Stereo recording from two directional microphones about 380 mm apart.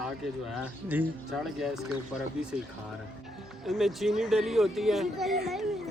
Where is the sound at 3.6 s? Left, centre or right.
Centre.